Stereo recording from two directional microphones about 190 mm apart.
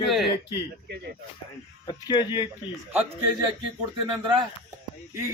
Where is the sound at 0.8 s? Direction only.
55° right (ahead or behind).